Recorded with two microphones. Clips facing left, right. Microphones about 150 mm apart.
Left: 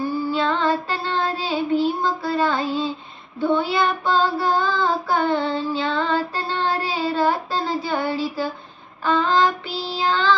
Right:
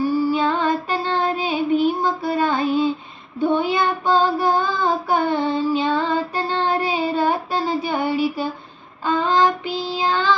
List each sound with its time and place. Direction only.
0.0 s child singing: 15° right (ahead or behind)